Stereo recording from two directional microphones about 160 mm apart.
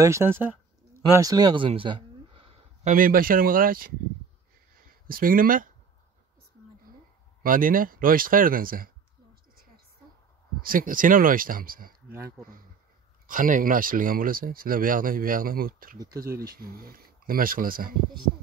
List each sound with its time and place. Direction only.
0.0 s speech: 20° right (ahead or behind)
0.4 s a sound: 15° right (ahead or behind); by 2.9 s 35° right (ahead or behind)
2.9 s speech: 60° right (ahead or behind)
7.4 s speech: 60° right (ahead or behind)
10.6 s speech: 60° right (ahead or behind)
12.1 s speech: 15° right (ahead or behind)
13.3 s speech: 60° right (ahead or behind)